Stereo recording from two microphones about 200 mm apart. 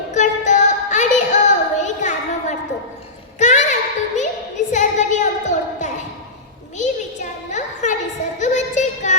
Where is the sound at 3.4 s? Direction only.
35° left (ahead or behind).